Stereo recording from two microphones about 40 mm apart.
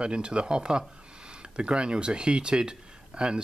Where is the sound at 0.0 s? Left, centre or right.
Right.